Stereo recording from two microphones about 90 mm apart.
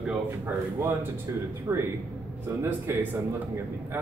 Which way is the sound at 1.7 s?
20° right (ahead or behind).